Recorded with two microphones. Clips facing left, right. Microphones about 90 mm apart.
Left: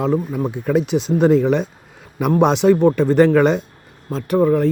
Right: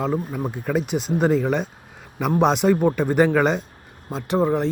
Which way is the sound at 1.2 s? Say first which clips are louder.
Left 6 dB; centre (ahead or behind).